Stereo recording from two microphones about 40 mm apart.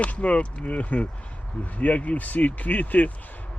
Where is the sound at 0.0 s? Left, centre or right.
Left.